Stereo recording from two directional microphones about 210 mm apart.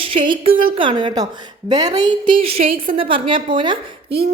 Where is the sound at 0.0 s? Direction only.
25° right (ahead or behind).